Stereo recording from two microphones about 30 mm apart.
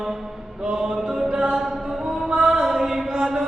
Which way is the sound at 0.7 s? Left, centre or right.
Right.